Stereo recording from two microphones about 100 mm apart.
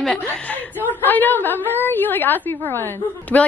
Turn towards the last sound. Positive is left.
turn(degrees=15)  # may be behind; listen again after turning